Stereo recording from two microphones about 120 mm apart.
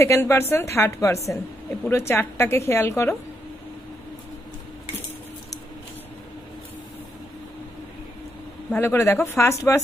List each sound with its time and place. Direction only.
0.0 s a woman's voice: 20° left (ahead or behind)
8.7 s a woman's voice: 20° left (ahead or behind)